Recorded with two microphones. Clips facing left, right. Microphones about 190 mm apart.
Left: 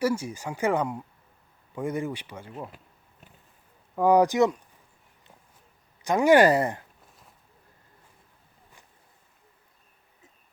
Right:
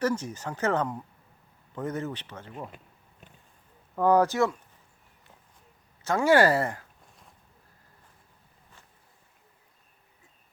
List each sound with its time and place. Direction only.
0.0 s speech: 10° left (ahead or behind)
3.9 s speech: 10° left (ahead or behind)
6.0 s speech: 15° left (ahead or behind)